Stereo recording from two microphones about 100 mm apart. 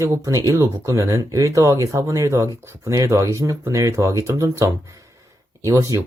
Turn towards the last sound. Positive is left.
turn(degrees=-30)  # may be behind; listen again after turning